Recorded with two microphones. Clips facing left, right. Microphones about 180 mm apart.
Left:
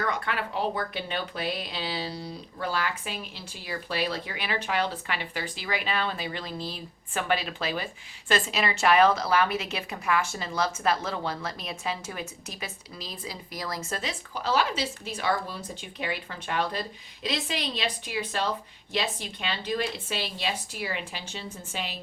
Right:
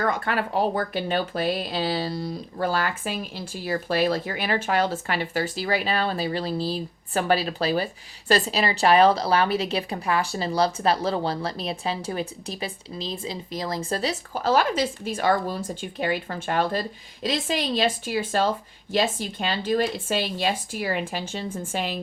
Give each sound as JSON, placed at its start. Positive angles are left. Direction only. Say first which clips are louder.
{"t": 0.0, "sound": "speech", "louder": "right 5 dB", "side_deg": -45}